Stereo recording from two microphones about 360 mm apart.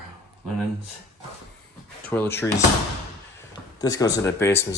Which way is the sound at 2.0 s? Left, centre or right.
Centre.